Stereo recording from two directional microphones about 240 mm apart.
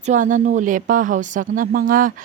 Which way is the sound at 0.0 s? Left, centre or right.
Right.